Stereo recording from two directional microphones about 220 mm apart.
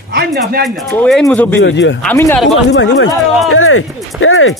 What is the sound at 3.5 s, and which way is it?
Speech, 65° left (ahead or behind).